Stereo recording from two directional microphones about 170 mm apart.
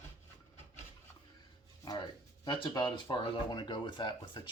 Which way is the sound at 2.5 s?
30° left (ahead or behind).